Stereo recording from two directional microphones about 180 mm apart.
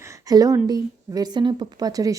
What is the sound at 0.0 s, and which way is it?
Speech, 20° right (ahead or behind).